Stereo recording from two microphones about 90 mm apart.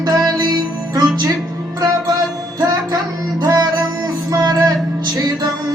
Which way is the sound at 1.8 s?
50° right (ahead or behind).